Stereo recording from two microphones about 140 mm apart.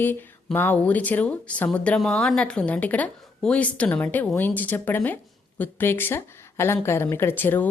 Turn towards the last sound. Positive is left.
turn(degrees=15)  # may be behind; listen again after turning